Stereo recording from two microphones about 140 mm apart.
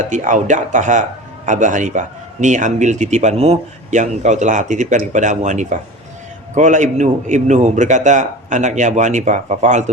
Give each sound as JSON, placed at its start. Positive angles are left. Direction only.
{"t": 0.0, "sound": "speech", "side_deg": -65}